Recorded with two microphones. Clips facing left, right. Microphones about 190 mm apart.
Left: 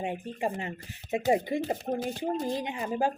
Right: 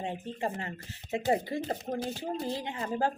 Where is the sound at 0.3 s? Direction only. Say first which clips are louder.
Left 2 dB; 15° left (ahead or behind).